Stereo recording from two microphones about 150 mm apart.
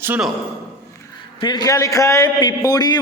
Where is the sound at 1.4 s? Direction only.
25° left (ahead or behind).